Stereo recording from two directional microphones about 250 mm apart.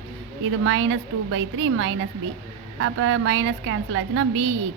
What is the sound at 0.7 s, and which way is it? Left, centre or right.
A woman's voice, right.